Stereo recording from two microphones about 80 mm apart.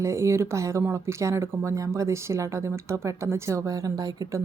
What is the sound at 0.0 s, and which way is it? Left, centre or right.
Speech, right.